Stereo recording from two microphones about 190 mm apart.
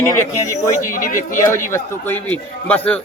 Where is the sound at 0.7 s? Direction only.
45° left (ahead or behind).